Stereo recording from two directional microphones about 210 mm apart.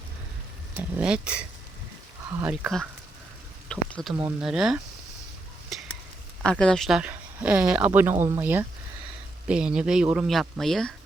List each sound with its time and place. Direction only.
0.8 s speech: 5° right (ahead or behind)
3.7 s a sound: 5° left (ahead or behind)
4.1 s speech: 10° right (ahead or behind)
5.7 s stir: centre (ahead or behind)
6.4 s speech: 5° left (ahead or behind)